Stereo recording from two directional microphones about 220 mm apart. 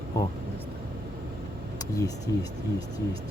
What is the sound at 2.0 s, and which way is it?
Speech, 15° left (ahead or behind).